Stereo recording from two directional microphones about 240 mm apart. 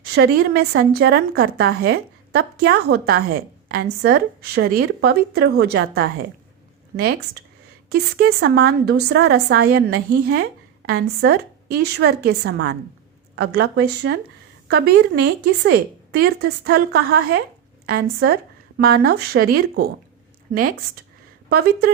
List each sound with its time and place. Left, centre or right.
0.0 s a woman's voice: right